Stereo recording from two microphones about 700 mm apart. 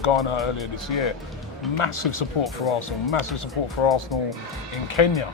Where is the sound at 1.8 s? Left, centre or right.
Left.